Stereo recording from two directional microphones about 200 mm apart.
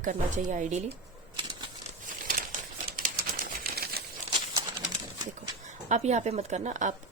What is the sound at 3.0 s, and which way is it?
Typewriter, 45° right (ahead or behind).